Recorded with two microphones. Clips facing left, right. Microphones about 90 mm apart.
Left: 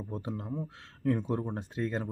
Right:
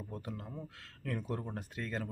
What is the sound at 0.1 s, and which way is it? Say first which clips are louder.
Speech: left 10 dB; 25° left (ahead or behind).